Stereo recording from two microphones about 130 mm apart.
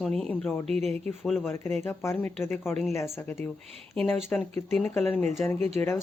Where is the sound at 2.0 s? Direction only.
15° left (ahead or behind).